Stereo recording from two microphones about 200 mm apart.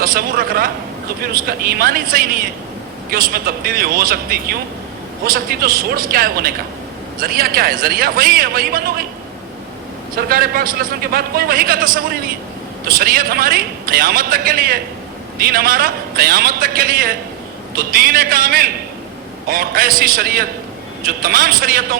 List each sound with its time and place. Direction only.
0.0 s a man's voice: 45° right (ahead or behind)
10.2 s a man's voice: 50° right (ahead or behind)
13.0 s a man's voice: 50° right (ahead or behind)